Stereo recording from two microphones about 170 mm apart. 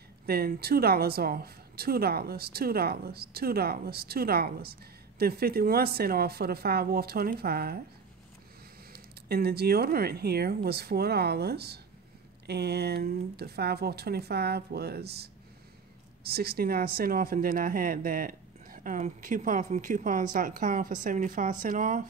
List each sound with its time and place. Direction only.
0.3 s speech: 65° right (ahead or behind)
8.9 s speech: 70° right (ahead or behind)
16.3 s speech: 65° right (ahead or behind); by 22.0 s 45° right (ahead or behind)